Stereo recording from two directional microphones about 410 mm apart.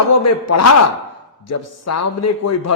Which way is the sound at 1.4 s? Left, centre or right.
Left.